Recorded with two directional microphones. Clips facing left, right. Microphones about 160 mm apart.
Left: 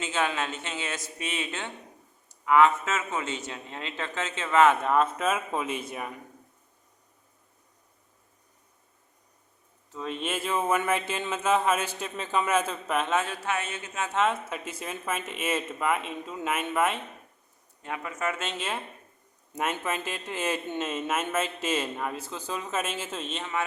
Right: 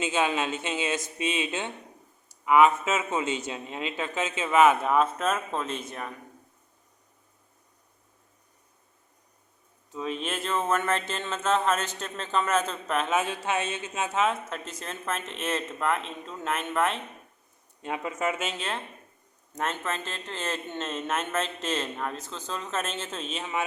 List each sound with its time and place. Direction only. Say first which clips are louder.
0.0 s a man's voice: right 2 dB; 15° right (ahead or behind); by 6.1 s 10° left (ahead or behind)
9.9 s speech: even; centre (ahead or behind)
13.1 s a man's voice: right 2 dB; 10° right (ahead or behind)
13.3 s speech: right 2 dB; 20° right (ahead or behind)
14.1 s speech: left 1 dB; centre (ahead or behind)
17.8 s speech: right 3 dB; 20° right (ahead or behind)
18.3 s speech: even; centre (ahead or behind)